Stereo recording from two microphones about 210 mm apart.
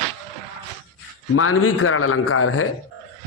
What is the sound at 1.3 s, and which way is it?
A man's voice, 90° left.